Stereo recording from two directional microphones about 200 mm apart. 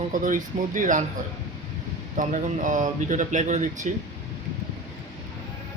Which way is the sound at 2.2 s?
40° right (ahead or behind).